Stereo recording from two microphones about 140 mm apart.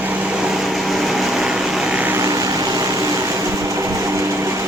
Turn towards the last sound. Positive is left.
turn(degrees=-20)  # may be behind; listen again after turning